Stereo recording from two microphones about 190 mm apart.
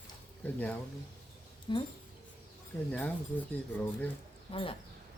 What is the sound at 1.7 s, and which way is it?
Speech, 25° left (ahead or behind).